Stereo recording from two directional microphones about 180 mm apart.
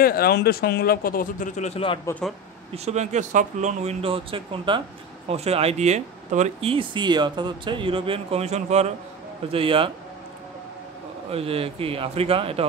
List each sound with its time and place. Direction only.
0.0 s speech: 55° left (ahead or behind); by 2.0 s 35° left (ahead or behind)
2.0 s speech: 5° left (ahead or behind)
2.7 s speech: 35° right (ahead or behind)
11.2 s speech: 30° right (ahead or behind)